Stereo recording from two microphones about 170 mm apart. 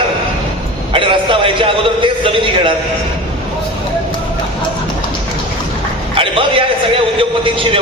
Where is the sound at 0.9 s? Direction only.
30° right (ahead or behind).